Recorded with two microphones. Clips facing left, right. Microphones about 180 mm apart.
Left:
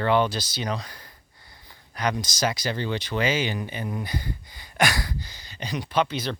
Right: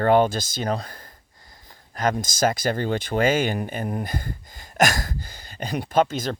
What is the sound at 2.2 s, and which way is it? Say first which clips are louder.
Speech: right 5 dB; 50° right (ahead or behind).